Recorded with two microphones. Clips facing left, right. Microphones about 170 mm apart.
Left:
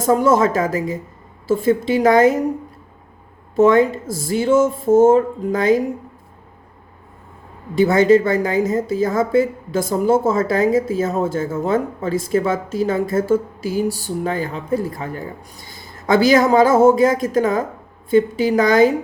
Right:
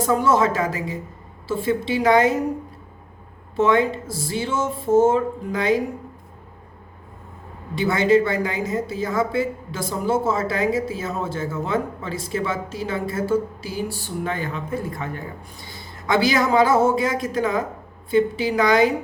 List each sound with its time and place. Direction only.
0.0 s speech: 45° left (ahead or behind)
3.5 s speech: 45° left (ahead or behind)
7.9 s speech: 45° left (ahead or behind)